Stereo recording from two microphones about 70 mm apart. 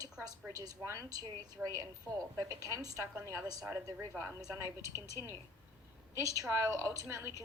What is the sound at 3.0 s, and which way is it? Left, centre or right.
Speech, right.